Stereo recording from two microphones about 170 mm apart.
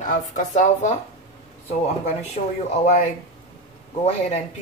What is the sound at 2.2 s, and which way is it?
Speech, 40° left (ahead or behind).